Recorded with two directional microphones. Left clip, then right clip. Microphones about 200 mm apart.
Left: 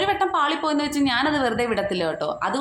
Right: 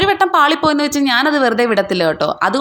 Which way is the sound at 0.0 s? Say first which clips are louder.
Right 9 dB; 35° right (ahead or behind).